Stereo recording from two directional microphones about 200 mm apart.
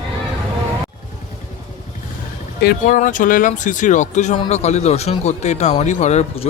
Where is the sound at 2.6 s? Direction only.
45° left (ahead or behind).